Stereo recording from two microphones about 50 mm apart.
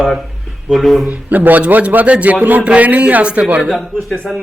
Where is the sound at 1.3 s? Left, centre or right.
Right.